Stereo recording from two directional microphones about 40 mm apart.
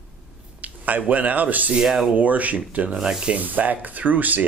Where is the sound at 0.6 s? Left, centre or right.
Right.